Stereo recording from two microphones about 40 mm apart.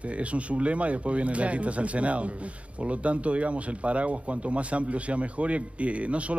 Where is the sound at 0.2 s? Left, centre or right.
Right.